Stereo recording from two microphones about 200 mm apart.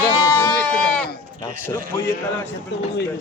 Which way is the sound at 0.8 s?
5° left (ahead or behind).